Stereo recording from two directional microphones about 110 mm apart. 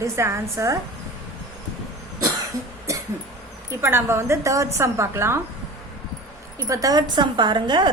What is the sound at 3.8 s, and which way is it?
A woman's voice, 20° right (ahead or behind).